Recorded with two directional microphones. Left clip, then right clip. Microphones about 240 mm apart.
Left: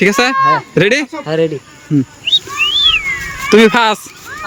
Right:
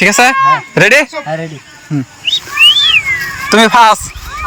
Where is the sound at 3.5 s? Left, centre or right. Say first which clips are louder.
Right 3 dB; centre.